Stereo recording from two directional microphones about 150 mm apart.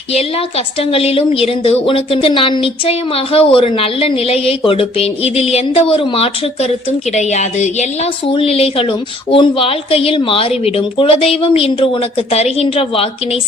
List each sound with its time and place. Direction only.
0.1 s a woman's voice: 40° left (ahead or behind)
7.2 s a woman's voice: 50° left (ahead or behind)
8.3 s a woman's voice: 40° left (ahead or behind)